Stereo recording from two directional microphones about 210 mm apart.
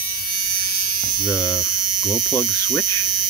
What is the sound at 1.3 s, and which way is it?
Hum, 5° right (ahead or behind).